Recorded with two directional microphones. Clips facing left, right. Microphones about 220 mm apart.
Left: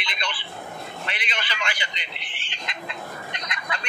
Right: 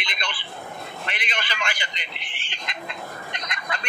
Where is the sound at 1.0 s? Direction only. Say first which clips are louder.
Right 2 dB; 45° right (ahead or behind).